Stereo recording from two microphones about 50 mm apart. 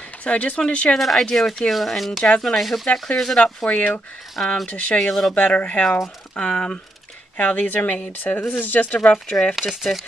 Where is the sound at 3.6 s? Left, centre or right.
Left.